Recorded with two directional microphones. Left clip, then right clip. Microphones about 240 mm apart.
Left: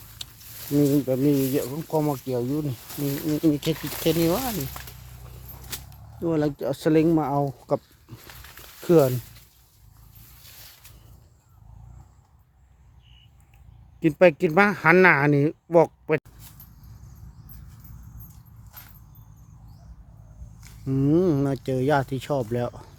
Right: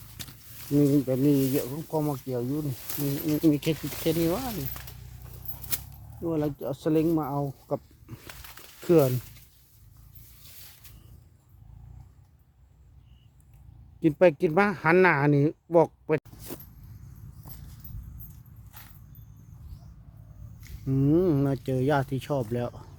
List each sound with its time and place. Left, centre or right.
0.8 s speech: centre
1.9 s speech: centre
3.4 s speech: centre
4.0 s speech: centre
6.1 s speech: left
8.8 s speech: centre
14.0 s speech: centre
20.6 s speech: centre